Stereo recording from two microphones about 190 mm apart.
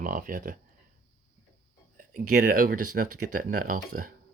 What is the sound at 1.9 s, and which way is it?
Speech, 45° right (ahead or behind).